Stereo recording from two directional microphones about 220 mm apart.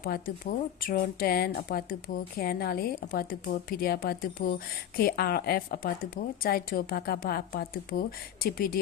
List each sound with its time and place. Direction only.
0.0 s a woman's voice: 40° left (ahead or behind)